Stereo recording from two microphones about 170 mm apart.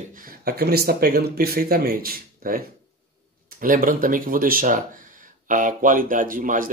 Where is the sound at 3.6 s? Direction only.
55° right (ahead or behind).